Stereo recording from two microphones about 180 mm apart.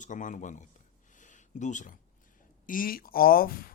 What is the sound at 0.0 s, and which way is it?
Speech, 45° left (ahead or behind).